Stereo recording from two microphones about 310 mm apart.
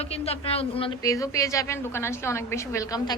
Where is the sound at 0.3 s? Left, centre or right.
Centre.